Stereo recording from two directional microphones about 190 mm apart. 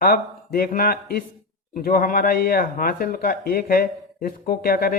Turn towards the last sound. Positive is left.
turn(degrees=55)  # may be behind; listen again after turning